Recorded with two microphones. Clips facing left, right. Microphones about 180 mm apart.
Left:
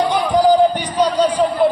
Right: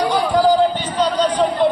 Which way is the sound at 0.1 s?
20° left (ahead or behind).